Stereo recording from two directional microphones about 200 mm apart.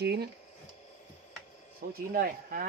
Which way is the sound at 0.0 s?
55° right (ahead or behind).